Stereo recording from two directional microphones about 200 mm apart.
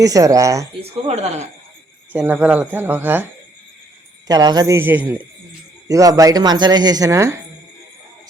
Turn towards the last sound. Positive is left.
turn(degrees=-15)  # may be behind; listen again after turning